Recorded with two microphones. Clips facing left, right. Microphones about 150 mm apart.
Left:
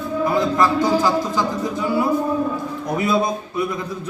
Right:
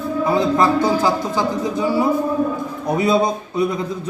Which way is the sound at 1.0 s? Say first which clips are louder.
Right 1 dB; 20° right (ahead or behind).